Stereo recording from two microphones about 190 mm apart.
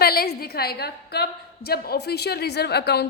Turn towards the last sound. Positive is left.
turn(degrees=60)  # may be behind; listen again after turning